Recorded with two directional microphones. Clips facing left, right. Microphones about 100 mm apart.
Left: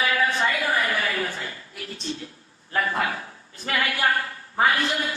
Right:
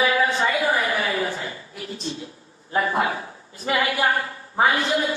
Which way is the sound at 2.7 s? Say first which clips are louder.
Right 3 dB; 25° right (ahead or behind).